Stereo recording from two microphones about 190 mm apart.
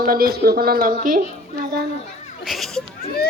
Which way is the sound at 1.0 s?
50° right (ahead or behind).